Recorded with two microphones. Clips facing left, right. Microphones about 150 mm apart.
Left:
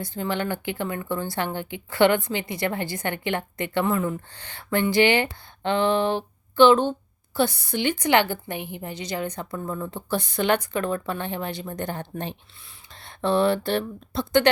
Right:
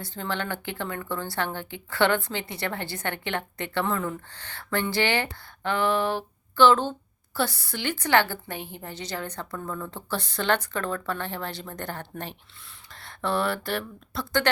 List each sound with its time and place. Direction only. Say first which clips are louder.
0.0 s a woman's voice: left 4 dB; 15° left (ahead or behind)